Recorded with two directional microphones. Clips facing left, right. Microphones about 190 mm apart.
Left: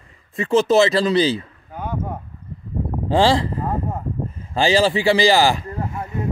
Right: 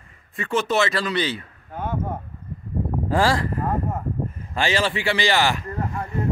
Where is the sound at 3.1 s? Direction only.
30° left (ahead or behind).